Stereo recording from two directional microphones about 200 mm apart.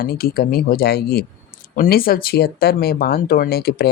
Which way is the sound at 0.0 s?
50° left (ahead or behind).